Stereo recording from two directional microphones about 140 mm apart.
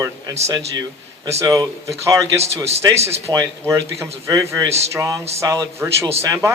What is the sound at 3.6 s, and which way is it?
A man's voice, 20° right (ahead or behind).